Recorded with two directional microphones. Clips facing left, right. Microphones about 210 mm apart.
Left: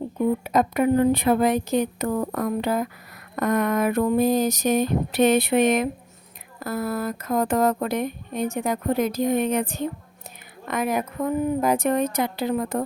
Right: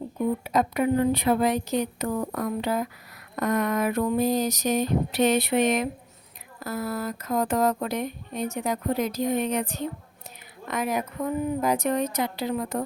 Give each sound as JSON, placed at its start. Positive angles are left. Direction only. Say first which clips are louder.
{"t": 0.4, "sound": "speech", "louder": "left 2 dB", "side_deg": 50}